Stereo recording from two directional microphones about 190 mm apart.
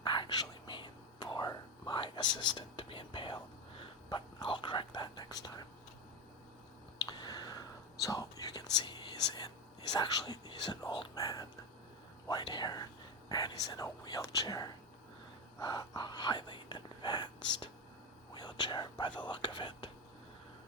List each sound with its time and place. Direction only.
0.0 s whispering: 25° left (ahead or behind)
7.0 s a sound: 20° left (ahead or behind)
8.0 s whispering: 20° left (ahead or behind)
18.3 s whispering: 20° left (ahead or behind)